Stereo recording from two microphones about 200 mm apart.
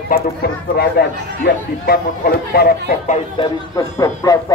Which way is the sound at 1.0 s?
50° left (ahead or behind).